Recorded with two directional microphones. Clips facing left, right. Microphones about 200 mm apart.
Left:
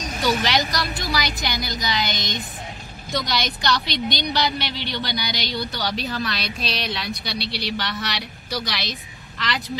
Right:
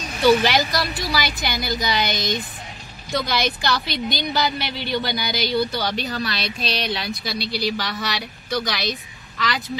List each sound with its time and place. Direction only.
0.2 s speech: centre (ahead or behind)